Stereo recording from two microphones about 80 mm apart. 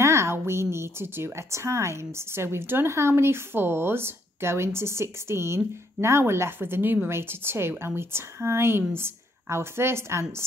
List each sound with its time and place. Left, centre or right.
0.0 s a woman's voice: right